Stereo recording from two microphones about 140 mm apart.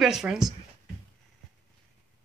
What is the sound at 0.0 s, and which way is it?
Speech, 5° right (ahead or behind).